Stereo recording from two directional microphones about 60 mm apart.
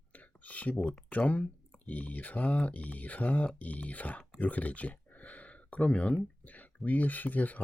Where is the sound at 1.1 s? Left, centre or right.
Left.